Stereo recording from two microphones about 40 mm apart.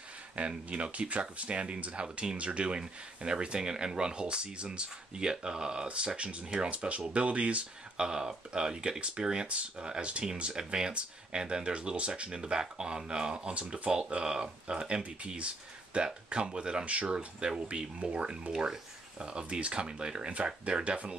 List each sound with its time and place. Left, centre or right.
0.4 s speech: right
8.0 s speech: centre